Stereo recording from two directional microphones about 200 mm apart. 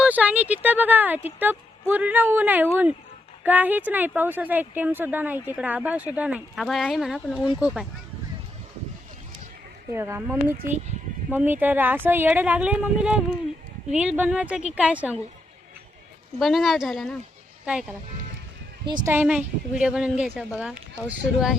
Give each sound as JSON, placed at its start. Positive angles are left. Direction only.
{"t": 0.0, "sound": "a sound", "side_deg": -10}
{"t": 1.4, "sound": "a woman's voice", "side_deg": -10}
{"t": 9.9, "sound": "a woman's voice", "side_deg": -10}
{"t": 16.4, "sound": "a woman's voice", "side_deg": 0}
{"t": 18.9, "sound": "a woman's voice", "side_deg": -20}
{"t": 19.1, "sound": "a woman's voice", "side_deg": -10}